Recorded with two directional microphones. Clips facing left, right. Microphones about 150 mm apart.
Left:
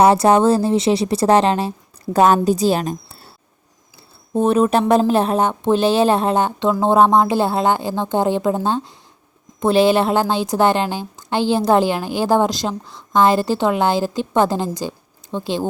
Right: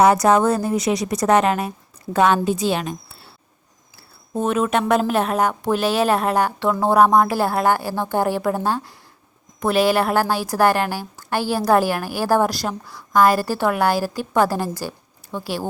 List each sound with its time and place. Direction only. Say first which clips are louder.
0.0 s a woman's voice: left 2 dB; 30° left (ahead or behind)
4.4 s a woman's voice: left 5 dB; 35° left (ahead or behind)